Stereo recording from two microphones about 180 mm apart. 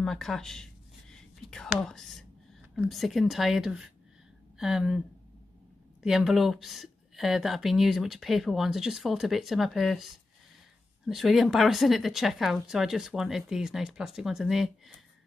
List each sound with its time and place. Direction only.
0.0 s a woman's voice: centre (ahead or behind)
6.0 s a woman's voice: centre (ahead or behind)